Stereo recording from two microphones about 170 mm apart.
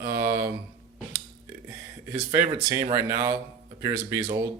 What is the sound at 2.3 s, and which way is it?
Speech, 20° right (ahead or behind).